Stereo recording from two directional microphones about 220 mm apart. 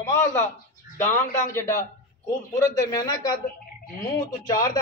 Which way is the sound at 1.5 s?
10° left (ahead or behind).